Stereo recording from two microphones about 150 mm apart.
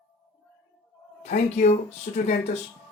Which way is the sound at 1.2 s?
50° left (ahead or behind).